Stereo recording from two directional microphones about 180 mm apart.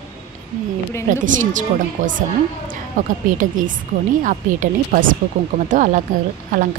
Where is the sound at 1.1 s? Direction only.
45° right (ahead or behind).